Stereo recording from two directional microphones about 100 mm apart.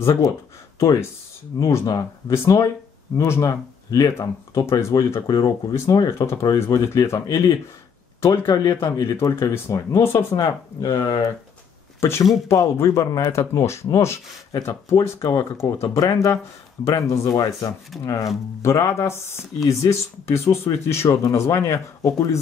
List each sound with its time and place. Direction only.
1.6 s speech: 35° left (ahead or behind)
9.0 s speech: 25° left (ahead or behind)
10.3 s speech: 40° left (ahead or behind)